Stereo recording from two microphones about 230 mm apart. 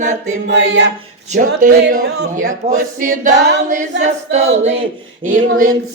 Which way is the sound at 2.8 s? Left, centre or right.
Right.